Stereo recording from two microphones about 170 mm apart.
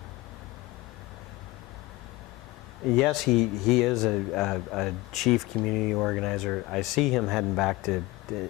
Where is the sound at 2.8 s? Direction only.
Centre (ahead or behind).